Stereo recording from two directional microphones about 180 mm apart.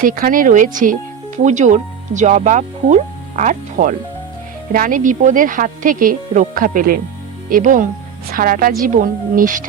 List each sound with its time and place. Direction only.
0.0 s speech: 50° right (ahead or behind)